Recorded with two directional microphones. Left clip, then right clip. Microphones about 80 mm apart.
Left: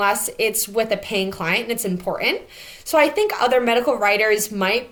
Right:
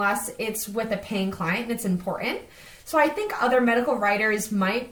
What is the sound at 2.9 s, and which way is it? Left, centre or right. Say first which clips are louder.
A woman's voice: left 5 dB; left.